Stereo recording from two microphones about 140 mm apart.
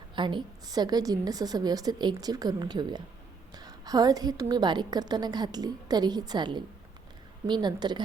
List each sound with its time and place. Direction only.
0.2 s a woman's voice: 35° right (ahead or behind)